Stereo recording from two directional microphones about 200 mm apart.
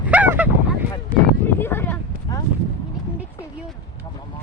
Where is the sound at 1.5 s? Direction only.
10° left (ahead or behind).